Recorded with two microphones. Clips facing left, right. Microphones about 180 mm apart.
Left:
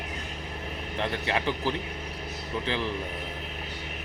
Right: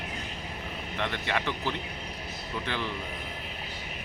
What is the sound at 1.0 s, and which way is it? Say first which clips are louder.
Speech: left 2 dB; 30° left (ahead or behind).